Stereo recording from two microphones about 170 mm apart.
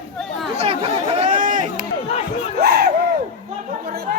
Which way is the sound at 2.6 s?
65° right (ahead or behind).